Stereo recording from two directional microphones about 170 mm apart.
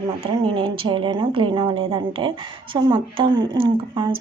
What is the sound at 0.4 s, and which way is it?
Speech, 30° right (ahead or behind).